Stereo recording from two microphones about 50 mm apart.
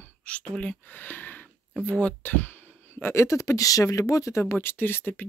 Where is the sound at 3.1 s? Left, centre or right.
Left.